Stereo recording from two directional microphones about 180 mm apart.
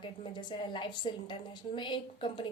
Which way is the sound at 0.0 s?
25° left (ahead or behind).